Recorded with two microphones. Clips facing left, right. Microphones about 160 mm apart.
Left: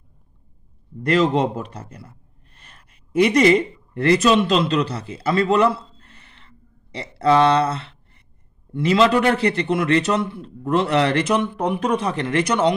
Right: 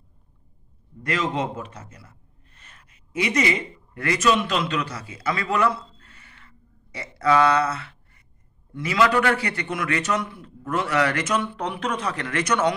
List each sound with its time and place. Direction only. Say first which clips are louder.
1.1 s a man's voice: left 8 dB; 35° left (ahead or behind)
3.3 s a man's voice: left 8 dB; 35° left (ahead or behind)